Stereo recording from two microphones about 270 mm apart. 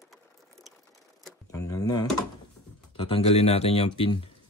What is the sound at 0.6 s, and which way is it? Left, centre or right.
Ratchet, centre.